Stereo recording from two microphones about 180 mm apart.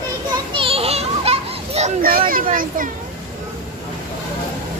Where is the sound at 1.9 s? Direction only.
55° right (ahead or behind).